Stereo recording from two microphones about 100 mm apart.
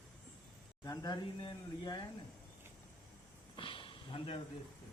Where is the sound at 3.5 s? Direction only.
60° left (ahead or behind).